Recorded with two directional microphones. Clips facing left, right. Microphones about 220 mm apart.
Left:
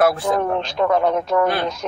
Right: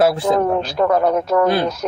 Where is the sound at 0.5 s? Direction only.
5° right (ahead or behind).